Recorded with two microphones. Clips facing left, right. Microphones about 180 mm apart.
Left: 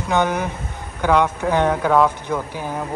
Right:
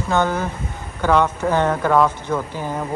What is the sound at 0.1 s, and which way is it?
Speech, 15° left (ahead or behind).